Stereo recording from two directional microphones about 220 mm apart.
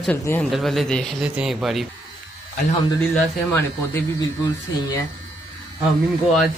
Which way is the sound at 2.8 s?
15° left (ahead or behind).